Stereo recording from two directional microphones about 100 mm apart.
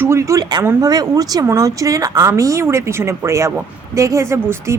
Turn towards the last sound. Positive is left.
turn(degrees=-30)  # may be behind; listen again after turning